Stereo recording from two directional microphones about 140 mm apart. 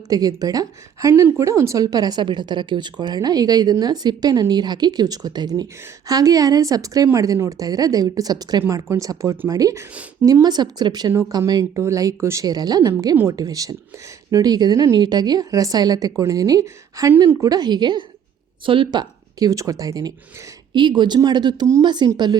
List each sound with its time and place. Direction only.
0.1 s a woman's voice: 25° right (ahead or behind)